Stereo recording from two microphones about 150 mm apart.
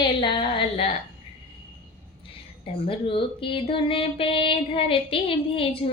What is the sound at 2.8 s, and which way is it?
Speech, 35° left (ahead or behind).